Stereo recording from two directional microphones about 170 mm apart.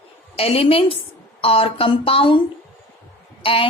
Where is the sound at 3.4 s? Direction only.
30° left (ahead or behind).